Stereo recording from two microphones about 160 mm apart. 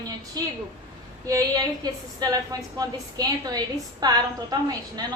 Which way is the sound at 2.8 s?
25° right (ahead or behind).